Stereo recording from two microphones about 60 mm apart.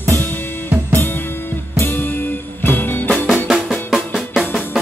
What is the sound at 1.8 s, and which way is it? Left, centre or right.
Music, left.